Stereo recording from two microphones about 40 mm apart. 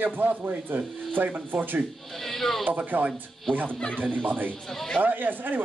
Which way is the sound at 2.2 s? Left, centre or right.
Centre.